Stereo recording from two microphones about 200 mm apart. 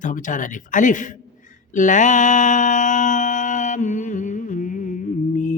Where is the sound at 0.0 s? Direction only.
40° left (ahead or behind).